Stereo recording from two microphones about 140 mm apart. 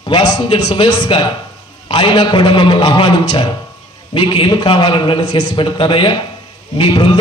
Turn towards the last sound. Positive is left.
turn(degrees=35)  # may be behind; listen again after turning